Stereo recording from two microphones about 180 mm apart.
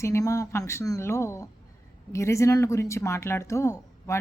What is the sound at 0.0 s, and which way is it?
Speech, 15° left (ahead or behind).